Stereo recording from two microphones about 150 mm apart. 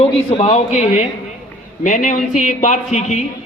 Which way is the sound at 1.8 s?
60° left (ahead or behind).